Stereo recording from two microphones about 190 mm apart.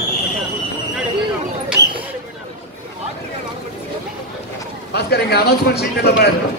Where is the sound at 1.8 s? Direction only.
15° right (ahead or behind).